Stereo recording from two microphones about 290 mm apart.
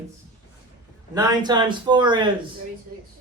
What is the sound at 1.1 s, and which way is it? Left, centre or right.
A man's voice, centre.